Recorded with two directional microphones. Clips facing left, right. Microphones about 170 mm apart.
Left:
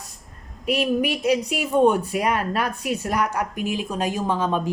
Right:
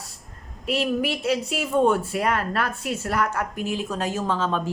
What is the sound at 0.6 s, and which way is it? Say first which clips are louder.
Speech: left 2 dB; 15° left (ahead or behind).